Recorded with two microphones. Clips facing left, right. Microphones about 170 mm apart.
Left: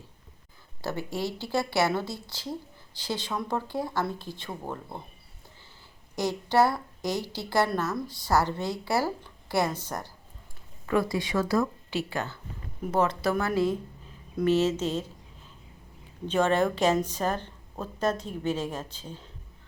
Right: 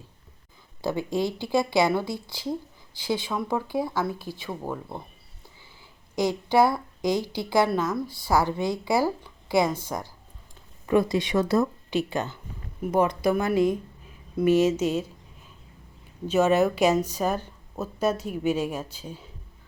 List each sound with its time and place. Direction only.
0.8 s a woman's voice: 15° right (ahead or behind)
6.1 s a woman's voice: 10° right (ahead or behind)
16.2 s a woman's voice: 10° right (ahead or behind)